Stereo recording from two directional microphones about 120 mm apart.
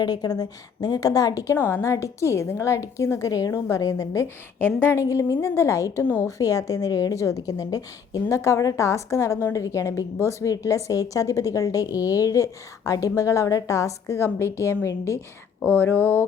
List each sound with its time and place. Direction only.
0.0 s a woman's voice: 35° left (ahead or behind)
1.5 s a woman's voice: 15° left (ahead or behind)
15.8 s a sound: 15° left (ahead or behind)